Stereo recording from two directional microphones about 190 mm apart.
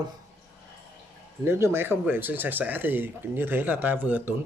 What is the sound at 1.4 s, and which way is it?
Speech, 10° right (ahead or behind).